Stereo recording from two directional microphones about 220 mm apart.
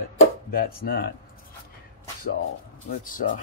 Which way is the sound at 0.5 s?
45° left (ahead or behind).